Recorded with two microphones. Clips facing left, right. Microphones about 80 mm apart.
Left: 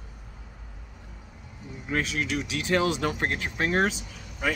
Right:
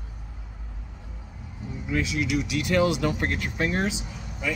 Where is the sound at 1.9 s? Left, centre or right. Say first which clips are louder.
Right 2 dB; left.